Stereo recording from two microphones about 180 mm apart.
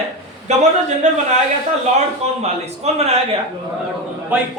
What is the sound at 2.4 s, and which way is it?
Speech, 35° right (ahead or behind).